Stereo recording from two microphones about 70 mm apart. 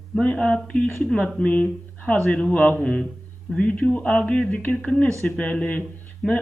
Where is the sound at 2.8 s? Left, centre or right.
Centre.